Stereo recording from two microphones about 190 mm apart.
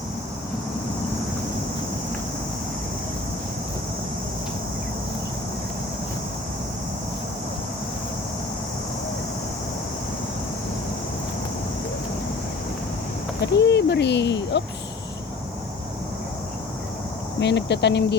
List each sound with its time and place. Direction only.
13.4 s speech: 65° left (ahead or behind)
17.4 s speech: 65° left (ahead or behind)